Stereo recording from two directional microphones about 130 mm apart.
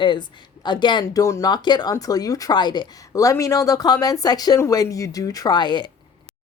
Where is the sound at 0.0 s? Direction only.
35° left (ahead or behind).